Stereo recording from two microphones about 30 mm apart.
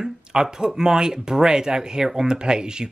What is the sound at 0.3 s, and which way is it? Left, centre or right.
Speech, right.